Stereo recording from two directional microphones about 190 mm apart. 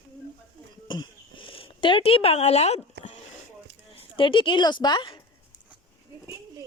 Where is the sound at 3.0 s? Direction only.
60° right (ahead or behind).